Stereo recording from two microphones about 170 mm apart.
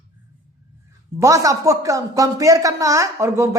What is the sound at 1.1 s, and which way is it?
Speech, 20° right (ahead or behind).